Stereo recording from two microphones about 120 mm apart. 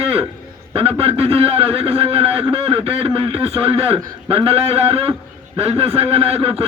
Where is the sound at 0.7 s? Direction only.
50° right (ahead or behind).